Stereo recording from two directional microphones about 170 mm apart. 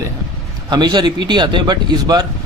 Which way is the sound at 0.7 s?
25° right (ahead or behind).